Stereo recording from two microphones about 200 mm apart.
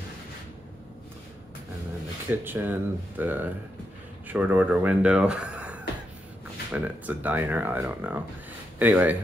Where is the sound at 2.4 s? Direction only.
10° right (ahead or behind).